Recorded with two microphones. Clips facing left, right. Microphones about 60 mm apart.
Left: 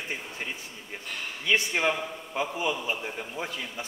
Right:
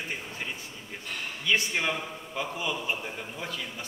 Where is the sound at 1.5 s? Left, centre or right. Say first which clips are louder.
Left 2 dB; centre.